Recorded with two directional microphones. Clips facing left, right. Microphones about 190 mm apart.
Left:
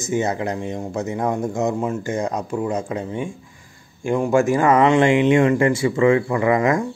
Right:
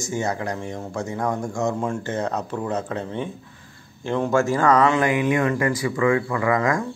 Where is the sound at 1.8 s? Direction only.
10° left (ahead or behind).